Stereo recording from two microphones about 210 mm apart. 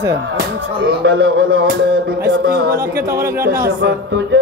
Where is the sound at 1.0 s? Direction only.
50° right (ahead or behind).